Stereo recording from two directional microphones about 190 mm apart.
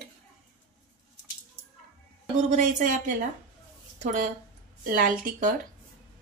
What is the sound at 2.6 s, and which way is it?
Speech, 45° right (ahead or behind).